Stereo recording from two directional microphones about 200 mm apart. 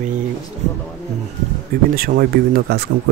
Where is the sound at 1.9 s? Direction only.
45° right (ahead or behind).